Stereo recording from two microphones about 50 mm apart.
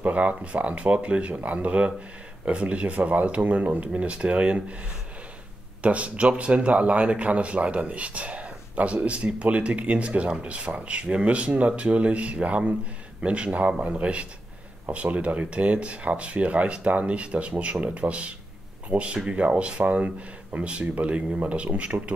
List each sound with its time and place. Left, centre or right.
0.0 s speech: right
5.8 s speech: right
21.9 s a man's voice: right